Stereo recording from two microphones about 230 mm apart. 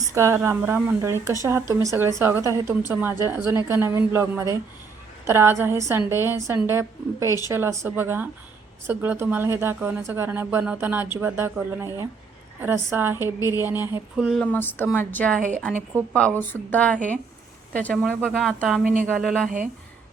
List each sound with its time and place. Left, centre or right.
0.1 s a woman's voice: centre
14.3 s a woman's voice: centre
15.4 s speech: right
16.4 s a woman's voice: centre